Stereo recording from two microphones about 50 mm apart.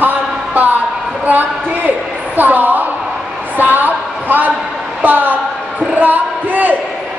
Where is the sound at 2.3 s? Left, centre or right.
Right.